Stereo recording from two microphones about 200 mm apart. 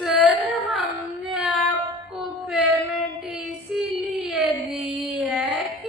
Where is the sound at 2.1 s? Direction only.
Centre (ahead or behind).